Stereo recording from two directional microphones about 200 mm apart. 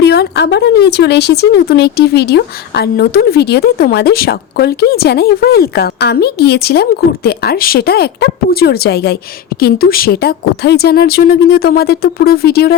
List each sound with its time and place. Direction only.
0.0 s speech: 55° left (ahead or behind)